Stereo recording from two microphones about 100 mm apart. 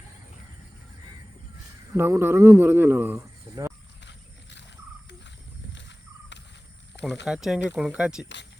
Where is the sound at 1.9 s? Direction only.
25° right (ahead or behind).